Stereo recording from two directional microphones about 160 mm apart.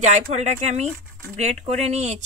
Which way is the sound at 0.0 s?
45° right (ahead or behind).